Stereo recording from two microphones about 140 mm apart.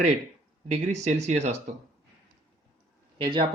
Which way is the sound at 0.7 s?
55° right (ahead or behind).